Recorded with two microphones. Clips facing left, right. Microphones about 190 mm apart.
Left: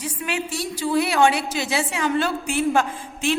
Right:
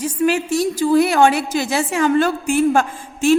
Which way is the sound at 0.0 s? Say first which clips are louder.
Right 9 dB; 45° right (ahead or behind).